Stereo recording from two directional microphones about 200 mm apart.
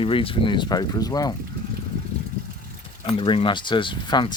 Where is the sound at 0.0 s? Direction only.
25° left (ahead or behind).